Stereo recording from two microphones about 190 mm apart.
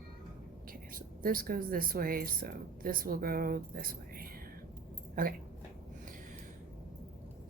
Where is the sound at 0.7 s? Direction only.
50° right (ahead or behind).